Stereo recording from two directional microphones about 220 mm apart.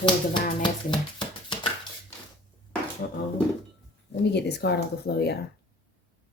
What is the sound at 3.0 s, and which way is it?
Speech, 45° left (ahead or behind).